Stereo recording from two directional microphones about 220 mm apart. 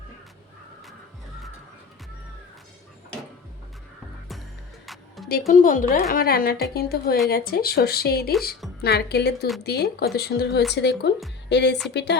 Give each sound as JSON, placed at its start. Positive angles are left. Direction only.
{"t": 4.9, "sound": "music", "side_deg": 0}
{"t": 5.5, "sound": "a woman's voice", "side_deg": 35}